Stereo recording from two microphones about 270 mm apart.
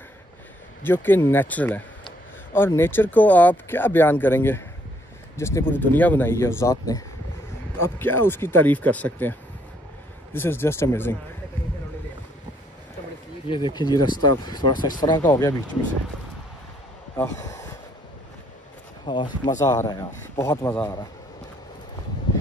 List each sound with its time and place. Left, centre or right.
0.8 s speech: centre
13.5 s speech: centre
17.2 s speech: centre
19.0 s speech: centre